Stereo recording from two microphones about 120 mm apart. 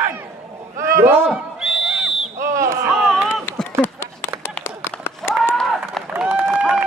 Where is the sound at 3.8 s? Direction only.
20° left (ahead or behind).